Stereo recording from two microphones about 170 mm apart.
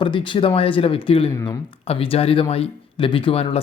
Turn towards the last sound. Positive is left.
turn(degrees=35)  # may be behind; listen again after turning